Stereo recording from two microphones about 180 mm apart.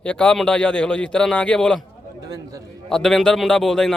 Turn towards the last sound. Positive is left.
turn(degrees=0)  # may be behind; listen again after turning